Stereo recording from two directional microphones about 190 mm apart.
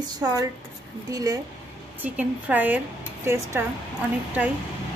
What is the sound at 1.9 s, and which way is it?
Speech, 10° right (ahead or behind).